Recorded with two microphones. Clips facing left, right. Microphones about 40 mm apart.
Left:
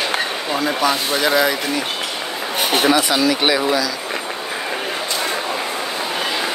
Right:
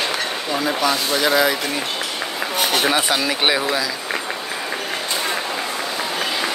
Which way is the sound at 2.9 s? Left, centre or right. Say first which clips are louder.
Left 3 dB; centre.